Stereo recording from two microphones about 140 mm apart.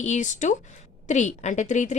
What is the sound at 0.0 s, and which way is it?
Speech, 60° left (ahead or behind).